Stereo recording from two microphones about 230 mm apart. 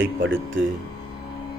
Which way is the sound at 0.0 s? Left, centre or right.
Right.